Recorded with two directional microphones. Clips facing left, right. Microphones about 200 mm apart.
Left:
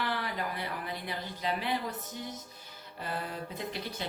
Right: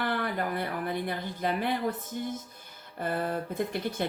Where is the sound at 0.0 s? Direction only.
55° right (ahead or behind).